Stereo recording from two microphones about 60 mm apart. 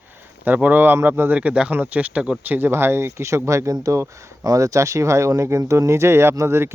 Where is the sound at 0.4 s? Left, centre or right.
Right.